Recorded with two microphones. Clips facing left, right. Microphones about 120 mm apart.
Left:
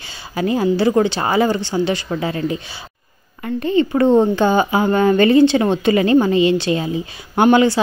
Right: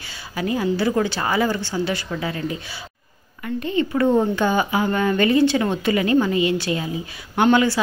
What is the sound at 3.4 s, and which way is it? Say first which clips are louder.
A woman's voice: left 5 dB; 35° left (ahead or behind).